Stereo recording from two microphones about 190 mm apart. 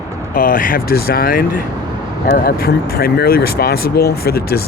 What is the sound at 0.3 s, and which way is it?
Speech, 45° left (ahead or behind).